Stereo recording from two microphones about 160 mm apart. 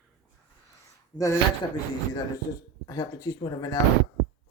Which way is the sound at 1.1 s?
5° left (ahead or behind).